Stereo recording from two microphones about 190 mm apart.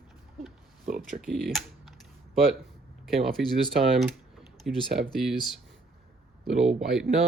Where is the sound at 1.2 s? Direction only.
Centre (ahead or behind).